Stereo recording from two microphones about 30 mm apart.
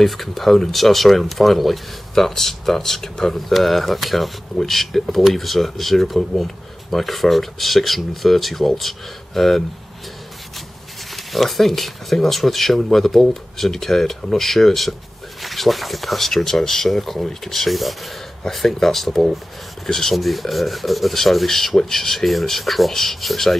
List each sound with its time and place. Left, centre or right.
0.0 s speech: centre
3.3 s speech: centre
11.3 s speech: centre
20.2 s speech: centre